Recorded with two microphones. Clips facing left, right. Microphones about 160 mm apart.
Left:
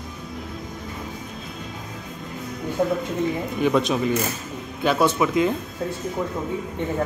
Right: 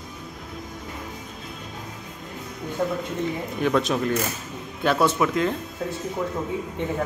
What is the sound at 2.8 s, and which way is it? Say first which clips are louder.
Speech: left 3 dB; 5° left (ahead or behind).